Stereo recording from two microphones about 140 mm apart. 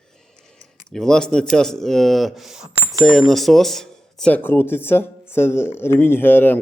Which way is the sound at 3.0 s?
Centre (ahead or behind).